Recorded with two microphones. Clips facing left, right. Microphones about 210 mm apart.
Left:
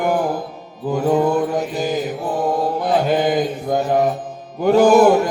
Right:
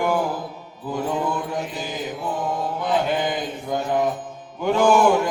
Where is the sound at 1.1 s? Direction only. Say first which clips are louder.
Left 11 dB; 40° left (ahead or behind).